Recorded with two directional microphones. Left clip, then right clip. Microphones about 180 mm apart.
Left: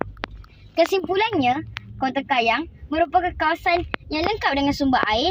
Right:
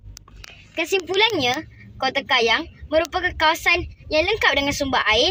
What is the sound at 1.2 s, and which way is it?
Speech, 15° left (ahead or behind).